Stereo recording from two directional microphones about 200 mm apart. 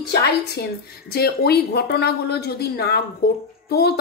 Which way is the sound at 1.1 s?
50° left (ahead or behind).